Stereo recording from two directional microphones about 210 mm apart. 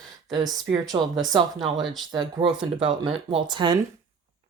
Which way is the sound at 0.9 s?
20° right (ahead or behind).